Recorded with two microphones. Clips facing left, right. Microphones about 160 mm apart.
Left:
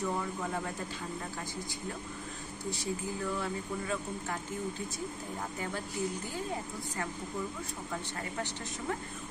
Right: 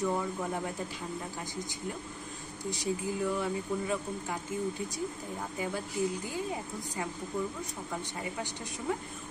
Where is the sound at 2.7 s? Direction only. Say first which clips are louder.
Right 5 dB; 15° right (ahead or behind).